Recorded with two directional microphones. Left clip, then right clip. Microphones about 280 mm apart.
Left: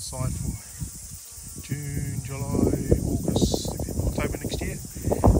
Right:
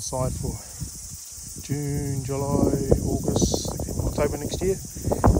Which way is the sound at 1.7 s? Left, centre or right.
Centre.